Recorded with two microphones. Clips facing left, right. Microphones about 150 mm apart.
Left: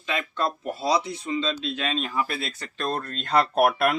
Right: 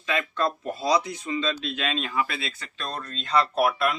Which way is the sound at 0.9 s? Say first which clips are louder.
Even; 30° left (ahead or behind).